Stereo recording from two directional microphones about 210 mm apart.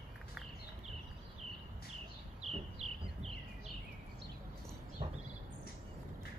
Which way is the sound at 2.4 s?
30° right (ahead or behind).